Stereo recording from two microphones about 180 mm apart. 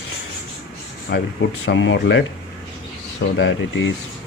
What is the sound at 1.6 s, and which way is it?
Speech, 90° left.